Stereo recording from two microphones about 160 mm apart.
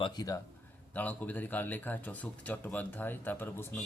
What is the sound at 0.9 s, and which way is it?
Speech, 10° left (ahead or behind).